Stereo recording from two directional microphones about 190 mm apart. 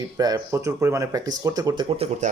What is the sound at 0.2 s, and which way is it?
Speech, 20° right (ahead or behind).